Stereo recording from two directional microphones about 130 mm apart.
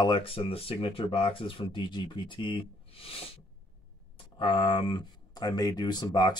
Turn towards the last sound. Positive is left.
turn(degrees=35)  # may be behind; listen again after turning